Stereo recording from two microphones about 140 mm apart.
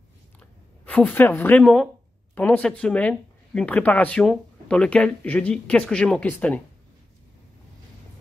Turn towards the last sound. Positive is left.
turn(degrees=10)  # may be behind; listen again after turning